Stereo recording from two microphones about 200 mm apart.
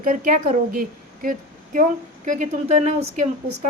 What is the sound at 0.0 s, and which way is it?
A woman's voice, 40° right (ahead or behind).